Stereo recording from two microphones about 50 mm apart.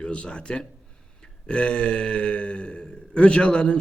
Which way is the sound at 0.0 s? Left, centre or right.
Left.